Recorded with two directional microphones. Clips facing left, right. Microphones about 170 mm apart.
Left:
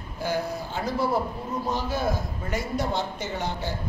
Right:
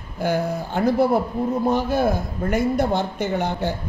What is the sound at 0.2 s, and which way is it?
A man's voice, 60° right (ahead or behind).